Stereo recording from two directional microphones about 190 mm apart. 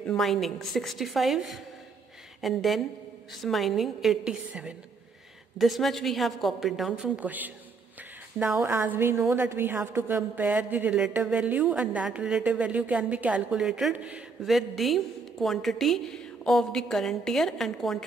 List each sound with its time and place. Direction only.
0.0 s a man's voice: 5° left (ahead or behind)